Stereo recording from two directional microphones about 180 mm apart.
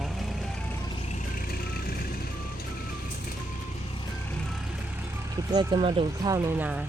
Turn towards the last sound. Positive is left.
turn(degrees=-10)  # may be behind; listen again after turning